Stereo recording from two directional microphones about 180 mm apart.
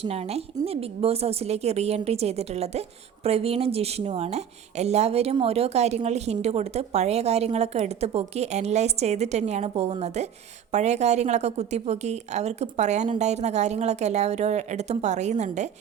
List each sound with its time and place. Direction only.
0.0 s speech: 35° right (ahead or behind)